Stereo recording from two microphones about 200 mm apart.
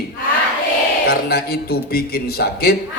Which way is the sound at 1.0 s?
50° left (ahead or behind).